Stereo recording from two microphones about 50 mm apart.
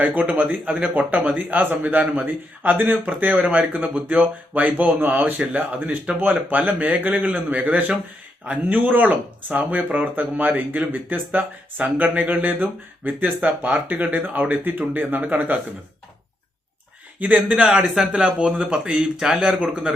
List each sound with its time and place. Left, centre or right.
0.0 s speech: right
4.6 s speech: right
17.3 s speech: centre